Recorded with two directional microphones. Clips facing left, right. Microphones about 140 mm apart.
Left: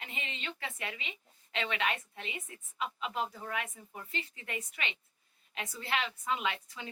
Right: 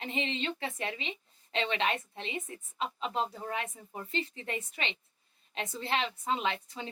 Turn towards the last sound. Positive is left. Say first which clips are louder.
# right 3 dB
turn(degrees=-30)  # may be behind; listen again after turning